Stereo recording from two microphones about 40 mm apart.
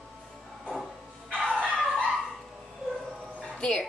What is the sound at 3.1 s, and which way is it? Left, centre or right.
Bow-wow, centre.